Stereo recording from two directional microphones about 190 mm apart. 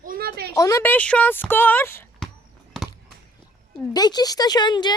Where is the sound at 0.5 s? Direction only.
15° left (ahead or behind).